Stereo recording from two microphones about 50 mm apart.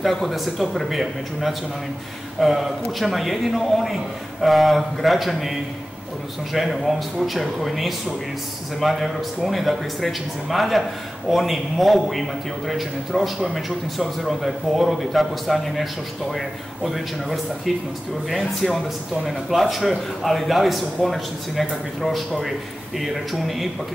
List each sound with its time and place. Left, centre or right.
0.0 s a man's voice: centre